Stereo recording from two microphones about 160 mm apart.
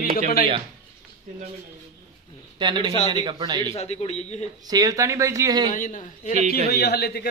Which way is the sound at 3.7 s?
40° left (ahead or behind).